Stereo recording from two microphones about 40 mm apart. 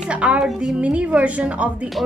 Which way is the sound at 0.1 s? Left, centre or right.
Right.